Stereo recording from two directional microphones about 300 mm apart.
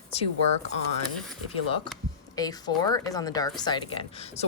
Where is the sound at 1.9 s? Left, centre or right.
Centre.